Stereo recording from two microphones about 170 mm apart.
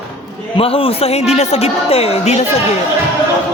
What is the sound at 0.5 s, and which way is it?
A man's voice, 35° left (ahead or behind).